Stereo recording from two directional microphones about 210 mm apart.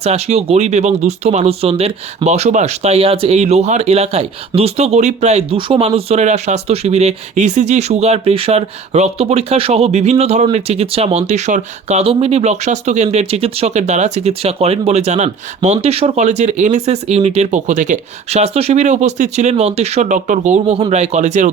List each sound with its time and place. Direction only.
0.0 s speech: 30° right (ahead or behind)